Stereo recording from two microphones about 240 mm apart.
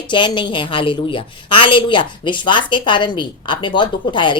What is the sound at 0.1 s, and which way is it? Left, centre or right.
A woman's voice, centre.